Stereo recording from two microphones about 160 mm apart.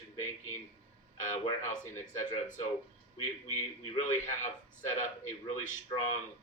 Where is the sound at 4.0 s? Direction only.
50° left (ahead or behind).